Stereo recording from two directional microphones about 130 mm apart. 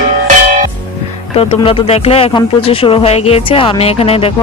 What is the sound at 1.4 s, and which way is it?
Speech, 45° left (ahead or behind).